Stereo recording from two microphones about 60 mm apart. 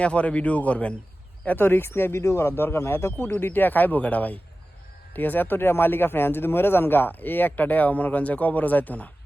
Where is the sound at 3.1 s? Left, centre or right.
Left.